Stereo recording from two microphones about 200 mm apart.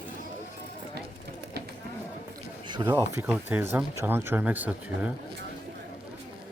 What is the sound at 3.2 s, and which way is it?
Speech, 10° right (ahead or behind).